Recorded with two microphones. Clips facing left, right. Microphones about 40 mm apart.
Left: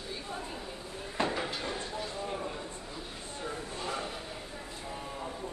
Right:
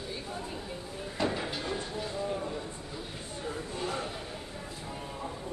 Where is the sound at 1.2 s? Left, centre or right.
Left.